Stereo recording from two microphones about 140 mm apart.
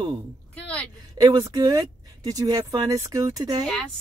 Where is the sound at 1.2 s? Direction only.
25° right (ahead or behind).